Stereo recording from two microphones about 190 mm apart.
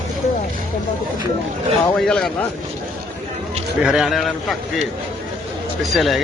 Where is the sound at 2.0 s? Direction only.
5° left (ahead or behind).